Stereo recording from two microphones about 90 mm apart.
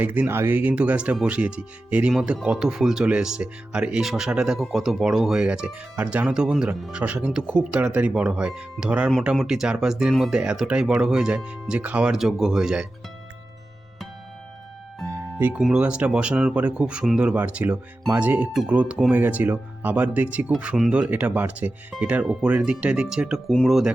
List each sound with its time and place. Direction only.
0.0 s speech: 20° right (ahead or behind)
12.1 s speech: 5° right (ahead or behind)
15.6 s speech: 10° right (ahead or behind)